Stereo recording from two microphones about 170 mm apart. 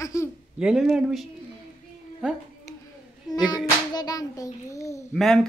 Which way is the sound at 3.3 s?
25° left (ahead or behind).